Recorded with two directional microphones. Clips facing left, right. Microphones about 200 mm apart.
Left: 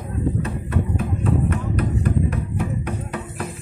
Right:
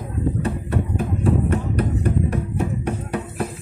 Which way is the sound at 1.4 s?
30° right (ahead or behind).